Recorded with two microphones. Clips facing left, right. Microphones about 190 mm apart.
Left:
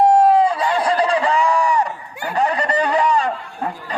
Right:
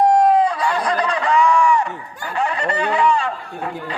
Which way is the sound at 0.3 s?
25° left (ahead or behind).